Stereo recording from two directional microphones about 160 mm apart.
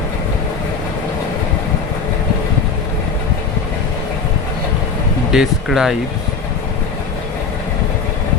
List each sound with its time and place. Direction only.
5.3 s speech: 5° right (ahead or behind)